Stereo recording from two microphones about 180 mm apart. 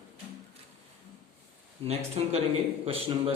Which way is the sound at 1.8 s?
35° right (ahead or behind).